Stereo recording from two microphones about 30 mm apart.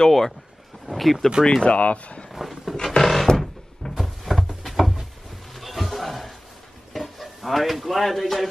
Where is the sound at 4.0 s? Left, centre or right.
Centre.